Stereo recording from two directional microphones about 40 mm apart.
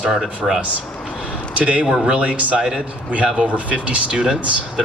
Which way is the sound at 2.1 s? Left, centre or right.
Right.